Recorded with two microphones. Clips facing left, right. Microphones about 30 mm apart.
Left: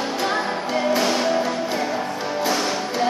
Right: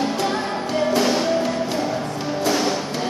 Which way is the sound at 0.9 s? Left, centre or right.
Centre.